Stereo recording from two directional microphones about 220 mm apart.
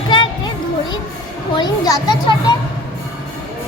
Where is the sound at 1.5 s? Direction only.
20° left (ahead or behind).